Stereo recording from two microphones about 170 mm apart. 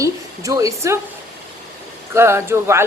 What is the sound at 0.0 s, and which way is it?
Speech, 20° right (ahead or behind).